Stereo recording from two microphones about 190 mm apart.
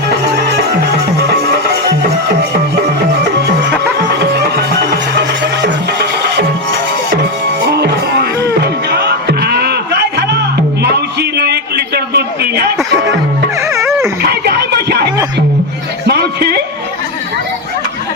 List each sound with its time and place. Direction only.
3.9 s music: 60° right (ahead or behind)
7.7 s music: 60° right (ahead or behind)
10.8 s a sound: 60° right (ahead or behind)
13.6 s dog: 15° right (ahead or behind)
13.8 s dog: centre (ahead or behind)
14.2 s a sound: 60° right (ahead or behind)
16.0 s music: 60° right (ahead or behind)